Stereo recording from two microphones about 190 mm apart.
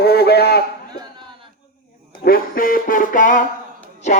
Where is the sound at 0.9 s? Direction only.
25° right (ahead or behind).